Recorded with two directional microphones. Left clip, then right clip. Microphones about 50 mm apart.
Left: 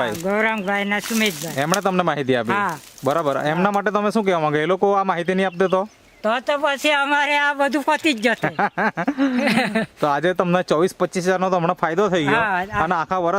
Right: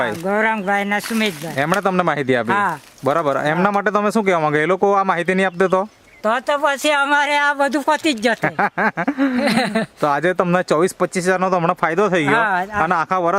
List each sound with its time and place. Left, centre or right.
0.3 s speech: right
1.8 s speech: centre
6.2 s speech: right
8.4 s speech: centre
9.4 s speech: right
10.0 s speech: centre
12.3 s speech: centre
12.8 s speech: centre